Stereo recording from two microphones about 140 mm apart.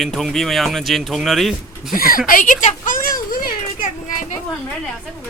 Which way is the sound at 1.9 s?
90° left.